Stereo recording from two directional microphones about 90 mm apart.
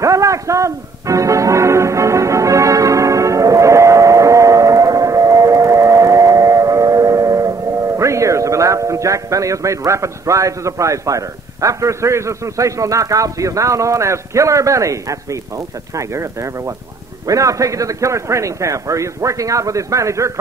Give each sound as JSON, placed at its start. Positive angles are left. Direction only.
{"t": 0.0, "sound": "music", "side_deg": -35}
{"t": 17.3, "sound": "a man's voice", "side_deg": -40}